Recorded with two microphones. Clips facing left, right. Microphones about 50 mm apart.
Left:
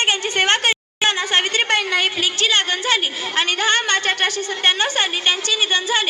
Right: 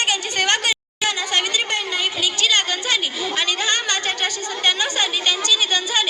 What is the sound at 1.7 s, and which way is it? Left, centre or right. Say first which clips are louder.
Speech: left 5 dB; left.